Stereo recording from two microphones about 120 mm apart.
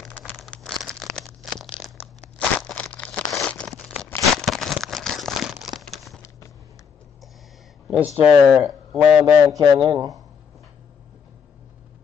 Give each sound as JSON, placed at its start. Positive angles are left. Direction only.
{"t": 0.5, "sound": "crumpling", "side_deg": 5}
{"t": 3.3, "sound": "tearing", "side_deg": 5}
{"t": 4.4, "sound": "crumpling", "side_deg": 0}
{"t": 8.0, "sound": "speech", "side_deg": -15}
{"t": 8.6, "sound": "a man's voice", "side_deg": 0}
{"t": 9.2, "sound": "a man's voice", "side_deg": -35}